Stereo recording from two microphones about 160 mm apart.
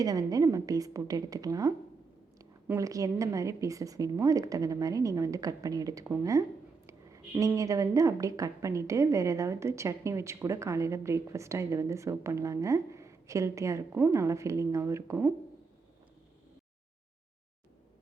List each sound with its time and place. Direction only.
0.0 s a woman's voice: 25° right (ahead or behind)